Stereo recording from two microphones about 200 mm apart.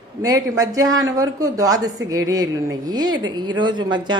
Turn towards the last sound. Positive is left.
turn(degrees=-20)  # may be behind; listen again after turning